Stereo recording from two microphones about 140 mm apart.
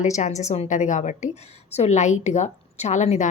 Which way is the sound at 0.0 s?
55° left (ahead or behind).